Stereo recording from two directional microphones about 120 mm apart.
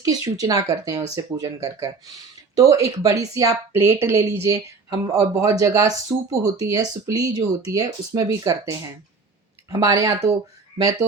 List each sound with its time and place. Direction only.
0.0 s a woman's voice: 30° right (ahead or behind)